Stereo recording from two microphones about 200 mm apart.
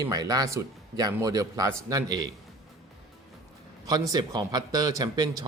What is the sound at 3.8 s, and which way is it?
A man's voice, 20° right (ahead or behind).